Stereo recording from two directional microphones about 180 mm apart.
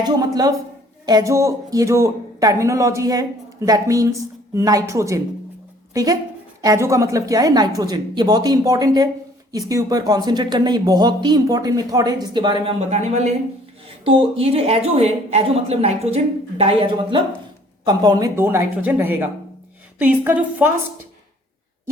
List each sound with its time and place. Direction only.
0.0 s speech: 20° right (ahead or behind)
12.9 s a woman's voice: 40° right (ahead or behind); by 20.7 s 10° right (ahead or behind)